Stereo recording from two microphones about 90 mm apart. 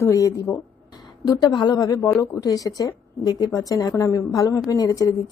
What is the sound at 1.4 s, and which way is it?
A woman's voice, 50° left (ahead or behind).